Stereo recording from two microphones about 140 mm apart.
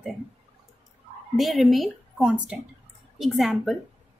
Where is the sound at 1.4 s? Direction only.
Centre (ahead or behind).